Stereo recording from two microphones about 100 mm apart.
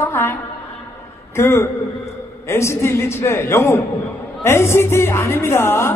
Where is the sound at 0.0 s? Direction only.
25° left (ahead or behind).